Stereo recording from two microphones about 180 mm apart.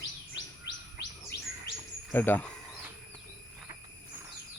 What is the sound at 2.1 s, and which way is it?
Speech, 10° left (ahead or behind).